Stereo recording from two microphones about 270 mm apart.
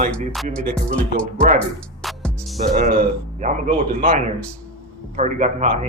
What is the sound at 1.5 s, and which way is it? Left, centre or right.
Music, centre.